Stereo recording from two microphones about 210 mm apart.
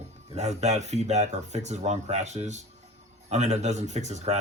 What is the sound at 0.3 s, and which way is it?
Speech, 30° right (ahead or behind).